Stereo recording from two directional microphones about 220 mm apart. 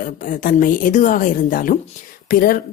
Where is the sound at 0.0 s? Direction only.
35° left (ahead or behind).